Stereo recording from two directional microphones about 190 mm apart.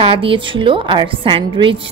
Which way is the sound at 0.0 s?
30° right (ahead or behind).